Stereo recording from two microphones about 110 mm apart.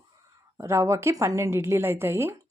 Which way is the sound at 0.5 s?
25° right (ahead or behind).